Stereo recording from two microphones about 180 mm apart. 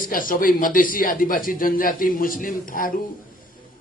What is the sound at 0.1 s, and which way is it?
A man's voice, 50° left (ahead or behind).